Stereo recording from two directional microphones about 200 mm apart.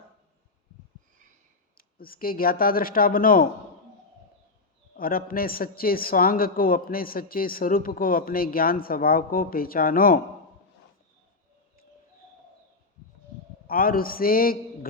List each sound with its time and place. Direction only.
2.0 s a man's voice: 45° left (ahead or behind)
4.9 s a man's voice: 45° left (ahead or behind)
13.7 s a man's voice: 45° left (ahead or behind)